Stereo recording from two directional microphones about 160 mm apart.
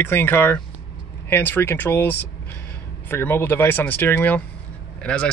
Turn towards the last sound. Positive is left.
turn(degrees=5)  # may be behind; listen again after turning